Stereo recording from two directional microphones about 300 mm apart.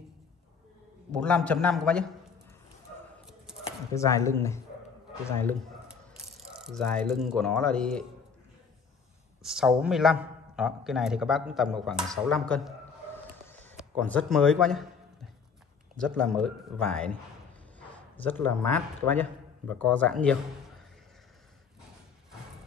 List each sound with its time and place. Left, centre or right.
1.1 s a man's voice: centre
3.9 s speech: centre
9.4 s a man's voice: centre
13.7 s a man's voice: centre
16.0 s a man's voice: centre